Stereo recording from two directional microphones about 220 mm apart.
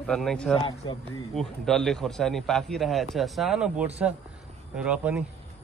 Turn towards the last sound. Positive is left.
turn(degrees=-5)  # may be behind; listen again after turning